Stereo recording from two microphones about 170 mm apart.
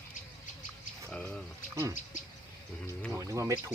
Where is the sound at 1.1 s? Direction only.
5° left (ahead or behind).